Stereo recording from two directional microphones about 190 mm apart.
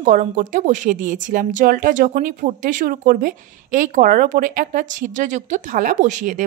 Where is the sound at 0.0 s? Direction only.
45° right (ahead or behind).